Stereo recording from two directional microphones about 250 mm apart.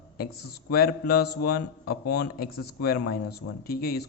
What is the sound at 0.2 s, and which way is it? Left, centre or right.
A man's voice, left.